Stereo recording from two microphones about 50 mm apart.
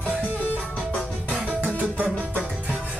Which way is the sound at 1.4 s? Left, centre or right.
Right.